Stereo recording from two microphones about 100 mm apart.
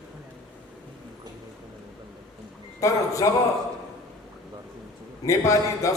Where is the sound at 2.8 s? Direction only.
35° left (ahead or behind).